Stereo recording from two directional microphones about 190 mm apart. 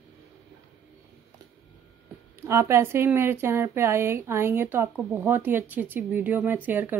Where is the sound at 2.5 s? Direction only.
15° right (ahead or behind).